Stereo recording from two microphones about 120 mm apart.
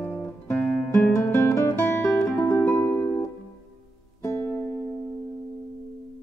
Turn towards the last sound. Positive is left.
turn(degrees=20)  # may be behind; listen again after turning